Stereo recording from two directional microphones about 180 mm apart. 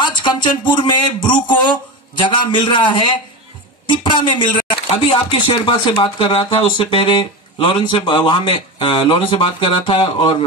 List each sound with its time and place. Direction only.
0.0 s speech: 25° left (ahead or behind)